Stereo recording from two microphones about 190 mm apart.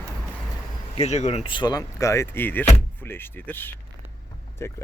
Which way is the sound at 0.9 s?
35° left (ahead or behind).